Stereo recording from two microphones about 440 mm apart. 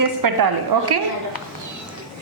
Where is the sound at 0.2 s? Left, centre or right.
Right.